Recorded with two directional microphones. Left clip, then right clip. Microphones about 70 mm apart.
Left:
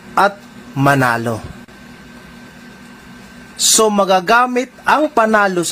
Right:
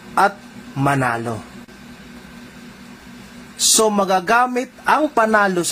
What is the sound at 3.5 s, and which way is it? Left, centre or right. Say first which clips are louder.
A man's voice: left 3 dB; centre.